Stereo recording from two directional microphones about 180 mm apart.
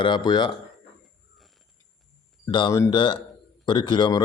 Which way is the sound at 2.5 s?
25° left (ahead or behind).